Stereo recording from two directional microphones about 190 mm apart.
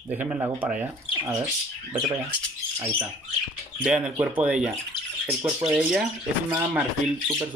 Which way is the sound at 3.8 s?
5° right (ahead or behind).